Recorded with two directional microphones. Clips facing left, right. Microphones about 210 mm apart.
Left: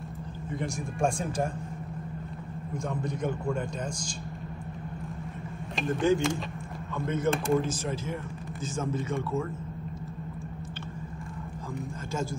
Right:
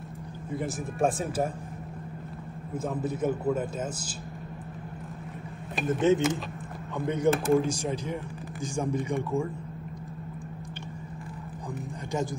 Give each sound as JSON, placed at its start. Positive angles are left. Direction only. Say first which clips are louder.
{"t": 0.6, "sound": "a man's voice", "louder": "right 2 dB", "side_deg": -5}
{"t": 2.7, "sound": "a man's voice", "louder": "right 3 dB", "side_deg": -5}
{"t": 5.9, "sound": "speech", "louder": "right 2 dB", "side_deg": -20}
{"t": 7.2, "sound": "a man's voice", "louder": "right 4 dB", "side_deg": 0}
{"t": 7.6, "sound": "speech", "louder": "right 2 dB", "side_deg": -15}